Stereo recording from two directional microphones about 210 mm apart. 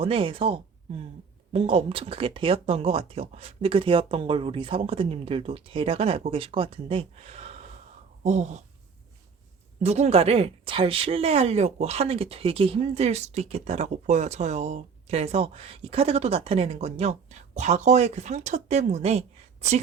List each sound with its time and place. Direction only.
0.0 s speech: 25° right (ahead or behind)
9.8 s speech: 30° right (ahead or behind)